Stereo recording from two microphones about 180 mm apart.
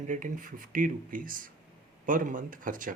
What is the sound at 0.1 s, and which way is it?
Speech, 45° right (ahead or behind).